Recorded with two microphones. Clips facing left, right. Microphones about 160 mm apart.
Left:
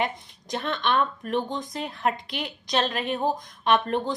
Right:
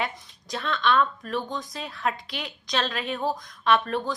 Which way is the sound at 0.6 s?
50° left (ahead or behind).